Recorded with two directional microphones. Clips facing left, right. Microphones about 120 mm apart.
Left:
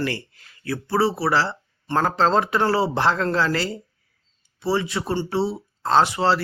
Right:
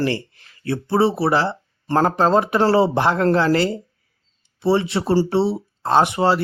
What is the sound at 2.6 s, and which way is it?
Speech, 25° right (ahead or behind).